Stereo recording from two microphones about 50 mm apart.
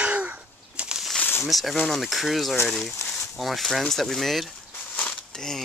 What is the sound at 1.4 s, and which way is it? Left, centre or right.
Speech, centre.